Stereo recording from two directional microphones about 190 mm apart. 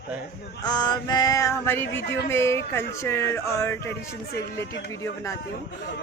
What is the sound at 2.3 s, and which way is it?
Speech, 15° left (ahead or behind).